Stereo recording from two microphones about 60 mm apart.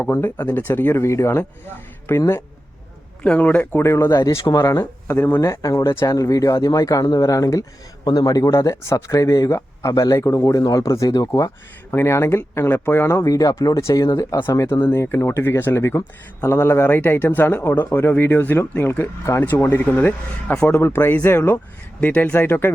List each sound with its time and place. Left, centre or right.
0.0 s speech: left
1.0 s speech: left
3.2 s speech: left
3.8 s speech: left
8.1 s speech: left
8.5 s speech: left
11.9 s speech: left
12.1 s speech: left
13.1 s speech: left
14.8 s speech: left